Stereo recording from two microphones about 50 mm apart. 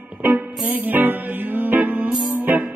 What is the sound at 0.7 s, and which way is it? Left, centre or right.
Music, right.